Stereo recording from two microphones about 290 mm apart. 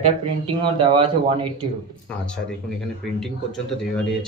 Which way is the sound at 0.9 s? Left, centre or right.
Centre.